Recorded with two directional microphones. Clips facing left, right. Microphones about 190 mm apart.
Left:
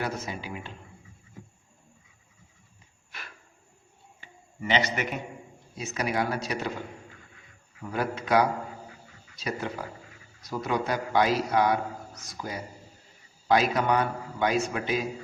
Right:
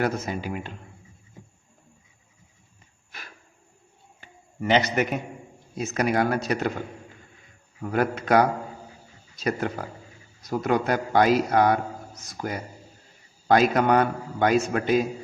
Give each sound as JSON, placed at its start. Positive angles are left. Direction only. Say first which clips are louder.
{"t": 0.0, "sound": "a man's voice", "louder": "right 6 dB", "side_deg": -50}
{"t": 4.2, "sound": "a sound", "louder": "right 5 dB", "side_deg": -45}
{"t": 5.7, "sound": "a man's voice", "louder": "right 5 dB", "side_deg": -50}